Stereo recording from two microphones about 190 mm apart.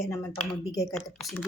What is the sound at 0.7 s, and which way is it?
Speech, 20° left (ahead or behind).